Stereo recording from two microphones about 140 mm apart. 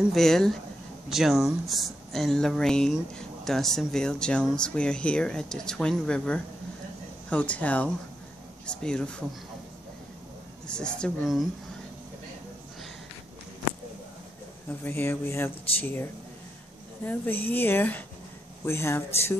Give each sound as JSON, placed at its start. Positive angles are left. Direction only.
{"t": 0.1, "sound": "speech", "side_deg": 5}
{"t": 10.7, "sound": "speech", "side_deg": 5}
{"t": 14.8, "sound": "speech", "side_deg": 15}